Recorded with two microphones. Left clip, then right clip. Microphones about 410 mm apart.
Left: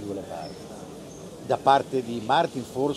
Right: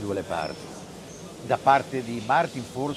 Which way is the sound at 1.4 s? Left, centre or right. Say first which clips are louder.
Even; centre.